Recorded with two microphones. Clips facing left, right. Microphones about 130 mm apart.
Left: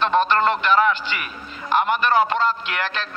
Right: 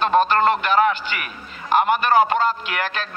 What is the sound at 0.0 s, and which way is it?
A man's voice, 45° right (ahead or behind).